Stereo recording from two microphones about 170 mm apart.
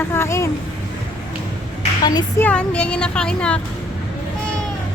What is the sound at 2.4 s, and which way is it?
Speech, 5° left (ahead or behind).